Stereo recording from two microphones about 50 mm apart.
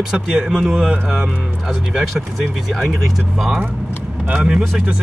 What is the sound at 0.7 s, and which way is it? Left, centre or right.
Speech, centre.